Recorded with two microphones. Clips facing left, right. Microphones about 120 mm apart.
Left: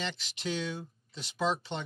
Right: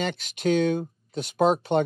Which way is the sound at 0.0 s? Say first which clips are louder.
Right 11 dB; 55° right (ahead or behind).